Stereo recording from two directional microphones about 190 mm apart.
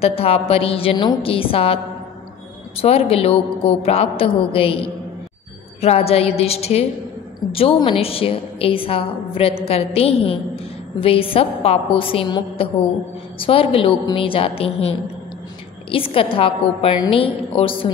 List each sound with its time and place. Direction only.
0.0 s a woman's voice: 30° left (ahead or behind)
2.8 s a woman's voice: 30° left (ahead or behind)
5.8 s a woman's voice: 35° left (ahead or behind)